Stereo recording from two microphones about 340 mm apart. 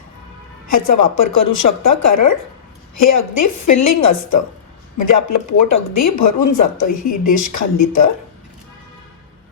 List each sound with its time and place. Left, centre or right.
0.7 s a woman's voice: left